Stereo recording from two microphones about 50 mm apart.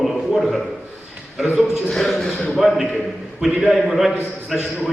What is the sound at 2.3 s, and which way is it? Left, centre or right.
Speech, left.